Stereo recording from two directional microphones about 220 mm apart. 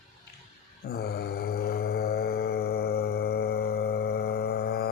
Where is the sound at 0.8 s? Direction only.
45° left (ahead or behind).